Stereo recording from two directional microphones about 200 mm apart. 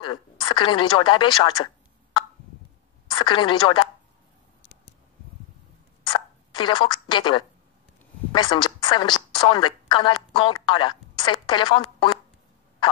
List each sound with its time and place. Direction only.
0.0 s a woman's voice: 25° left (ahead or behind)
3.1 s a woman's voice: 25° left (ahead or behind)
6.0 s a sound: 25° left (ahead or behind)
8.3 s a woman's voice: 25° left (ahead or behind)